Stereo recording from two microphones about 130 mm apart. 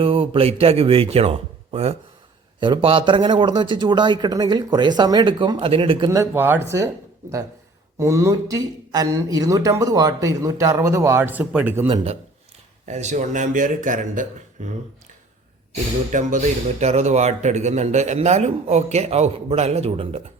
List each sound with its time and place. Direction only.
0.0 s speech: 45° right (ahead or behind)
2.6 s speech: 40° right (ahead or behind)
6.1 s speech: 20° right (ahead or behind)
12.8 s speech: 65° right (ahead or behind); by 14.7 s 80° right
16.1 s a man's voice: 70° right (ahead or behind); by 20.2 s 45° right (ahead or behind)